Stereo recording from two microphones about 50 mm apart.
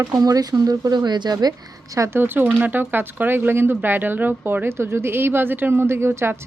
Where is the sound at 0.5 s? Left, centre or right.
Right.